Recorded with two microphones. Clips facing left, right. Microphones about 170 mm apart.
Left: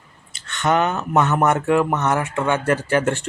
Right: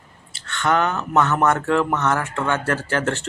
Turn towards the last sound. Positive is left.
turn(degrees=15)  # may be behind; listen again after turning